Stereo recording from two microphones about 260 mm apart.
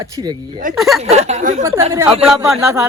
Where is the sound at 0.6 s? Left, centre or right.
Right.